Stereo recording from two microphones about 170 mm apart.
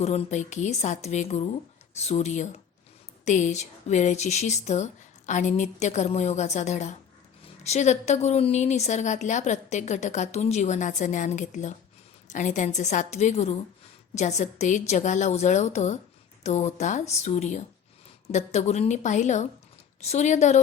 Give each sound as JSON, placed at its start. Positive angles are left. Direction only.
{"t": 0.0, "sound": "a woman's voice", "side_deg": 40}